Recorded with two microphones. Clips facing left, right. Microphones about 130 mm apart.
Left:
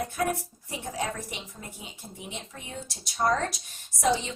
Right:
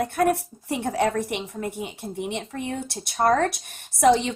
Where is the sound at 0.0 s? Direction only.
65° right (ahead or behind).